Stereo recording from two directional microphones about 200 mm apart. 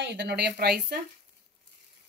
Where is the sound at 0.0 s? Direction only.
60° right (ahead or behind).